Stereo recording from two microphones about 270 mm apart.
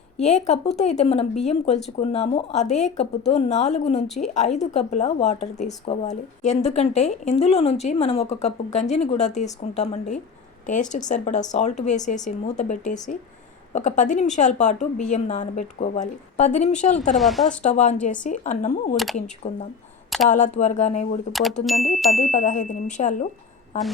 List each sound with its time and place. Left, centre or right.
0.2 s speech: left
17.2 s speech: centre
17.6 s speech: left
21.6 s speech: centre
22.1 s speech: left